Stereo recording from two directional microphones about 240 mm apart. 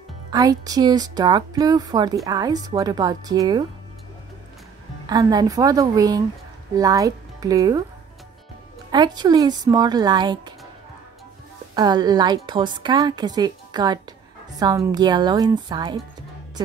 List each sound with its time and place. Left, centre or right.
0.3 s a woman's voice: centre
5.0 s a woman's voice: centre
8.9 s a woman's voice: centre
11.7 s a woman's voice: centre
14.5 s a sound: centre
14.9 s a woman's voice: centre